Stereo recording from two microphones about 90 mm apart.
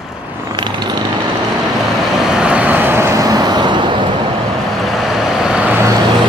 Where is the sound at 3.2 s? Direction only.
45° right (ahead or behind).